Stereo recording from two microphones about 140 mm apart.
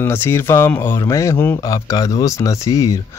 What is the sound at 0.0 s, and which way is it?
Speech, 15° left (ahead or behind).